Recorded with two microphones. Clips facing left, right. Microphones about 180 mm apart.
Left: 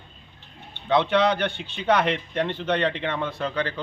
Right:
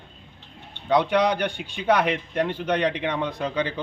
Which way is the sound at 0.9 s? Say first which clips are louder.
Even; 10° right (ahead or behind).